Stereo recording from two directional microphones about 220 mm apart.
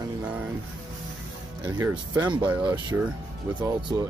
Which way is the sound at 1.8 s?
20° right (ahead or behind).